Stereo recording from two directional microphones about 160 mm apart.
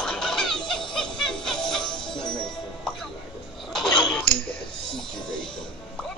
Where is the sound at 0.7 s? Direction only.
5° left (ahead or behind).